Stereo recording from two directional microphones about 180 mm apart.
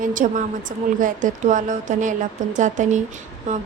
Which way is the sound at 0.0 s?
45° right (ahead or behind).